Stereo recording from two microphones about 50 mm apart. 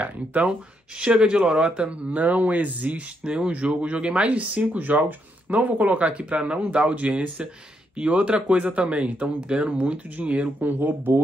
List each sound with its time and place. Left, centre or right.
0.0 s speech: right
10.7 s speech: right